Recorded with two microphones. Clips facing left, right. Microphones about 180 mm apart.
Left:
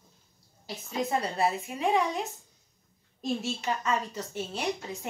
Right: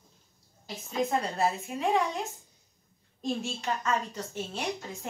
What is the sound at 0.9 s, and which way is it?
A woman's voice, centre (ahead or behind).